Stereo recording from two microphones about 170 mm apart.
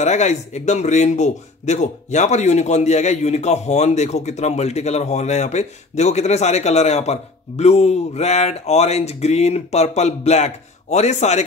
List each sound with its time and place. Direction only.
0.0 s speech: 45° left (ahead or behind)